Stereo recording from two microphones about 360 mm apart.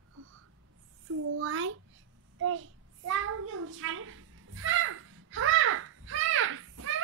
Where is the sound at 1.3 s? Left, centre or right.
Right.